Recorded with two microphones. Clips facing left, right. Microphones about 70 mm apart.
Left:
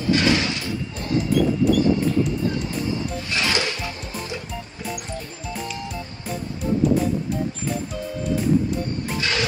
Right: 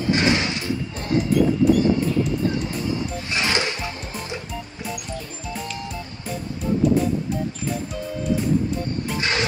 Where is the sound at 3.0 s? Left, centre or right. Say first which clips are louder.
Even; right.